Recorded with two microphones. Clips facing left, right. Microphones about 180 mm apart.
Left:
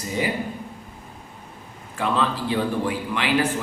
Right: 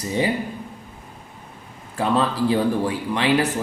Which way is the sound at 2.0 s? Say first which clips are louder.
Right 3 dB; 35° right (ahead or behind).